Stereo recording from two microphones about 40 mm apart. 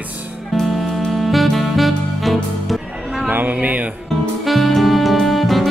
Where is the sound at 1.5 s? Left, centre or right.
Centre.